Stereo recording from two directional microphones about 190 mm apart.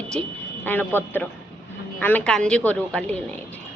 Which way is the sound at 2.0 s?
10° left (ahead or behind).